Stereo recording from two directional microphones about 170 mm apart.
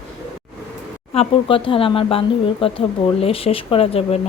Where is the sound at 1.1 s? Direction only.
30° left (ahead or behind).